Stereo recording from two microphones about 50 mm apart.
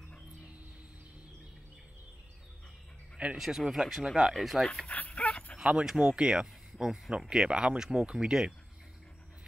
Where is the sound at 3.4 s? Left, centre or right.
Centre.